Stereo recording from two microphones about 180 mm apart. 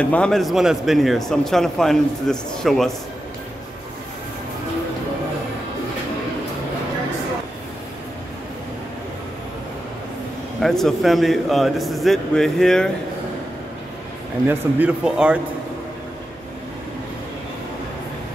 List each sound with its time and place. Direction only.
0.0 s speech: 5° left (ahead or behind)
10.6 s speech: centre (ahead or behind)
14.5 s speech: 5° right (ahead or behind)